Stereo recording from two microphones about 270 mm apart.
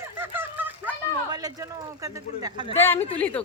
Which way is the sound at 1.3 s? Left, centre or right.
Centre.